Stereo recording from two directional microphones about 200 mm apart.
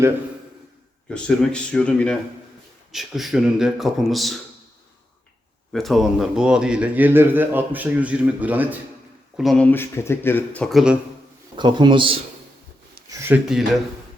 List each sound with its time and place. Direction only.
1.1 s speech: 5° left (ahead or behind)
5.7 s a man's voice: centre (ahead or behind)
9.4 s speech: 5° left (ahead or behind)
11.5 s a man's voice: 25° right (ahead or behind)
13.1 s speech: 10° right (ahead or behind)